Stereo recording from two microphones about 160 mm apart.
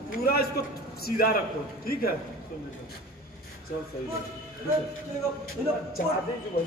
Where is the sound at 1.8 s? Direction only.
70° left (ahead or behind).